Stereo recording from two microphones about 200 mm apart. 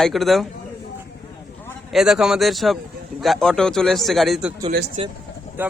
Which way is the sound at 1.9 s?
Centre (ahead or behind).